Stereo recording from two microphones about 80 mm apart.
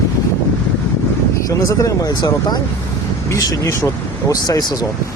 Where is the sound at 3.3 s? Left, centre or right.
Left.